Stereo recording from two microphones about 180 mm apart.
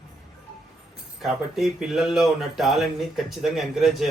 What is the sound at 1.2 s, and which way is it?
Speech, centre (ahead or behind).